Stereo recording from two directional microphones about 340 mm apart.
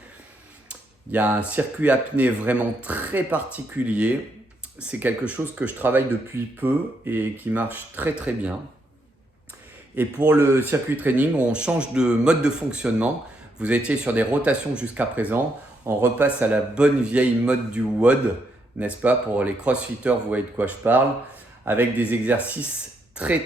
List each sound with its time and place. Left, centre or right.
0.7 s speech: centre
9.9 s a man's voice: centre